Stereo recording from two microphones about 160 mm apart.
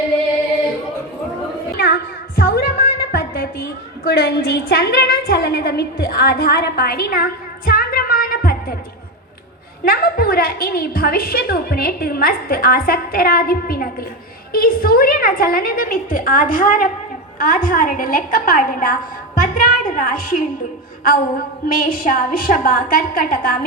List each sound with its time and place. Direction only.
1.7 s a sound: 80° left
9.8 s a woman's voice: 70° left (ahead or behind)
21.7 s a woman's voice: 60° left (ahead or behind)